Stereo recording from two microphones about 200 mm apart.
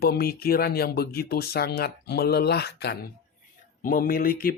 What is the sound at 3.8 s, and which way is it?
Speech, 45° left (ahead or behind).